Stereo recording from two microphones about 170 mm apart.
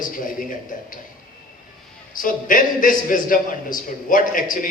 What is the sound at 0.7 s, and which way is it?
Speech, 50° left (ahead or behind).